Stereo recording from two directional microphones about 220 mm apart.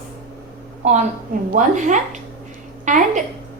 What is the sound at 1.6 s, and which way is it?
A woman's voice, 35° right (ahead or behind).